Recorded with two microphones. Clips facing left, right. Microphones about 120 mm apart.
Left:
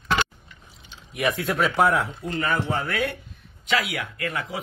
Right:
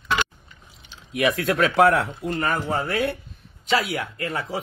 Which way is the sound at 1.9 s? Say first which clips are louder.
Right 3 dB; 65° right (ahead or behind).